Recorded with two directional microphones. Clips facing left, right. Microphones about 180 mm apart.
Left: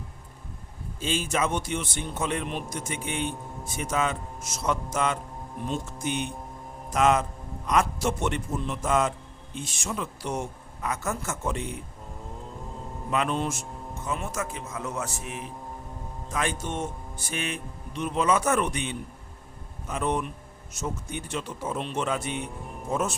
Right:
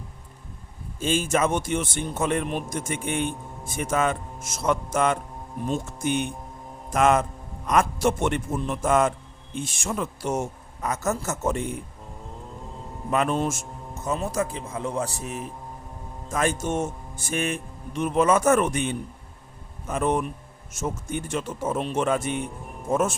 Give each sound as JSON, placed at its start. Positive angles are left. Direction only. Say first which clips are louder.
{"t": 0.9, "sound": "speech", "louder": "right 4 dB", "side_deg": -50}
{"t": 13.1, "sound": "a man's voice", "louder": "right 3 dB", "side_deg": -45}